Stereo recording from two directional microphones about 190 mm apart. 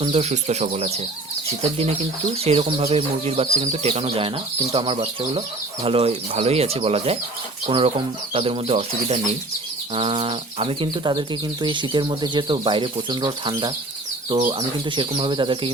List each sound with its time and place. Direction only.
0.0 s speech: 35° right (ahead or behind)